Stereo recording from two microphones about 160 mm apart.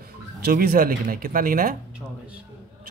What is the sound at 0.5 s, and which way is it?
Speech, 65° right (ahead or behind).